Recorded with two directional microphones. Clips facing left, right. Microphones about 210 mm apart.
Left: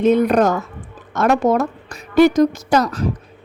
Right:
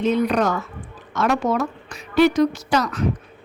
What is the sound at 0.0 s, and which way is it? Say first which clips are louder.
A woman's voice: left 5 dB; 50° left (ahead or behind).